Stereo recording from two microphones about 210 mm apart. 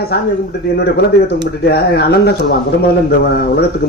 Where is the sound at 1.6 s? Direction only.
50° left (ahead or behind).